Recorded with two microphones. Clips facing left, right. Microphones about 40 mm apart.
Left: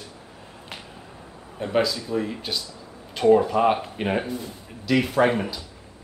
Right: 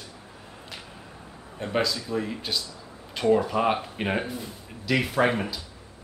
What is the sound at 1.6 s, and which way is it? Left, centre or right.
Speech, centre.